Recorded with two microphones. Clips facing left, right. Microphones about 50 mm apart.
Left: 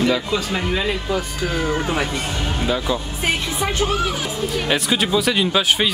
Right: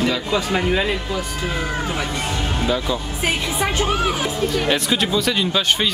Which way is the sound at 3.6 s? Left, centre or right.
Right.